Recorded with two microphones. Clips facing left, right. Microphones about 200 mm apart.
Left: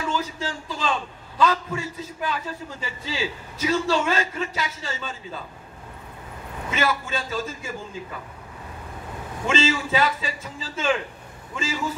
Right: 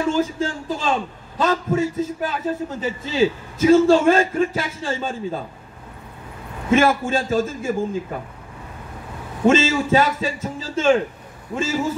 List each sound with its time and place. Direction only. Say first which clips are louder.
0.0 s a man's voice: right 7 dB; 50° right (ahead or behind)
6.7 s a man's voice: right 9 dB; 50° right (ahead or behind)
9.5 s a man's voice: right 7 dB; 45° right (ahead or behind)